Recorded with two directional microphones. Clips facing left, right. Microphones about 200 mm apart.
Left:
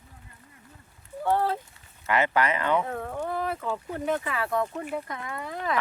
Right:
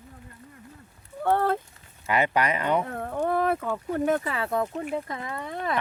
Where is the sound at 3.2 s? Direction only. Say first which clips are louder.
Right 7 dB; 55° right (ahead or behind).